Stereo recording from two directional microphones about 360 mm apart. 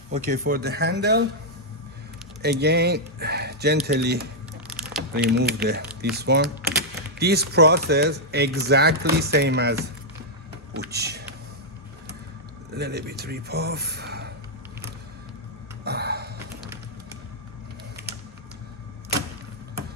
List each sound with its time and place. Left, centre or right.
0.1 s speech: right
2.4 s speech: right
4.7 s crumpling: centre
5.1 s speech: right
10.8 s speech: right
12.7 s speech: right
15.8 s a sound: right